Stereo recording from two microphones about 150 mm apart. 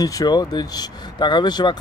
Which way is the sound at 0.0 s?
25° left (ahead or behind).